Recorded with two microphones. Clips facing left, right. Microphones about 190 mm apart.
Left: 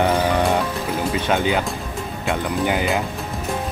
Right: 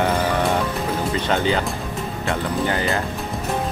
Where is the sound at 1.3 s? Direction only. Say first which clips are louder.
Left 1 dB; 10° left (ahead or behind).